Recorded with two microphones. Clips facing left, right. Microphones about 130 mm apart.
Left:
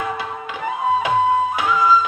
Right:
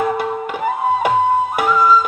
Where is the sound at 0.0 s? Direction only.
55° right (ahead or behind).